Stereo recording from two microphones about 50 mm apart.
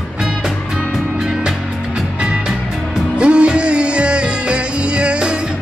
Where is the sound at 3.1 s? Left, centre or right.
Right.